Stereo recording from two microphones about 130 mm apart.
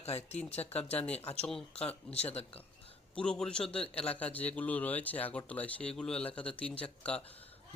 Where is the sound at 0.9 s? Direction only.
10° left (ahead or behind).